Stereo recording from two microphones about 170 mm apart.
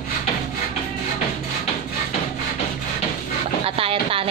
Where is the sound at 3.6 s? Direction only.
35° right (ahead or behind).